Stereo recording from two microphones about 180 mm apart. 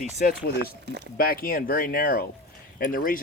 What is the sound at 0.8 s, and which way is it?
Speech, 70° right (ahead or behind).